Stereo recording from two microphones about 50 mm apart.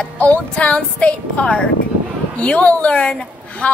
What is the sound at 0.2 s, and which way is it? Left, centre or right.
A woman's voice, left.